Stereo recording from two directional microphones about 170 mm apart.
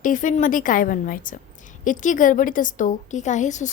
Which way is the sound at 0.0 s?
50° left (ahead or behind).